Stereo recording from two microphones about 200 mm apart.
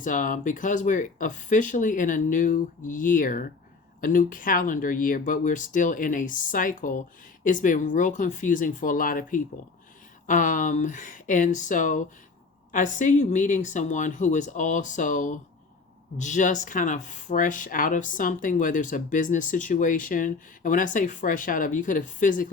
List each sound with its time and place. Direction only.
0.0 s speech: 40° left (ahead or behind)